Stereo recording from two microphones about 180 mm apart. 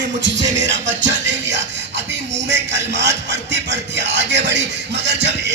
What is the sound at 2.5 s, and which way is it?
Speech, 75° right (ahead or behind).